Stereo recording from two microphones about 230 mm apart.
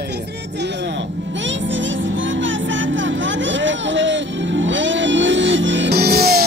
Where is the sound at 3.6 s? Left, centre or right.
Right.